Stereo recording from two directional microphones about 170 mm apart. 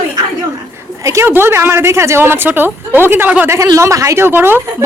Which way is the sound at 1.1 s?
15° right (ahead or behind).